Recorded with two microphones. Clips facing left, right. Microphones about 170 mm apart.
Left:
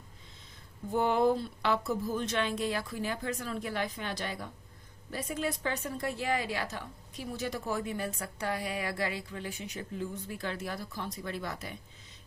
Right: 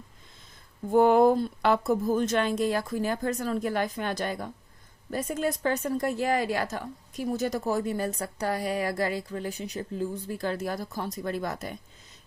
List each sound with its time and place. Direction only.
0.9 s a woman's voice: 50° right (ahead or behind)